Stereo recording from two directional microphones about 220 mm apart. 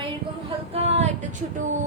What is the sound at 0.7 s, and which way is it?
Speech, 30° right (ahead or behind).